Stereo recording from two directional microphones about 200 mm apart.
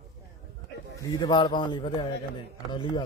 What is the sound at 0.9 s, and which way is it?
A man's voice, 25° left (ahead or behind).